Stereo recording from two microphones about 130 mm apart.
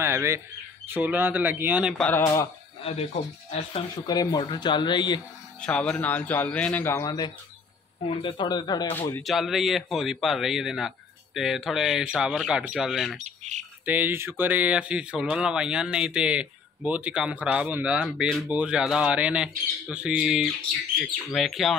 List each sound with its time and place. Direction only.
0.0 s fowl: 20° right (ahead or behind)
0.9 s speech: 15° right (ahead or behind)
2.0 s speech: 10° left (ahead or behind)
2.8 s speech: 50° left (ahead or behind)
4.1 s speech: 30° left (ahead or behind)
5.6 s speech: 10° left (ahead or behind); by 8.9 s 35° left (ahead or behind)
9.2 s speech: centre (ahead or behind)
13.2 s squawk: 65° right (ahead or behind)
13.8 s speech: 15° right (ahead or behind)